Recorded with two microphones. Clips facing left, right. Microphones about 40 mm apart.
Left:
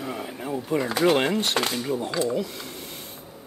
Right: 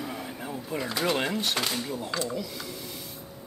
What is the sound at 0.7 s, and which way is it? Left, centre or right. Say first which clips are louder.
Speech: left 7 dB; left.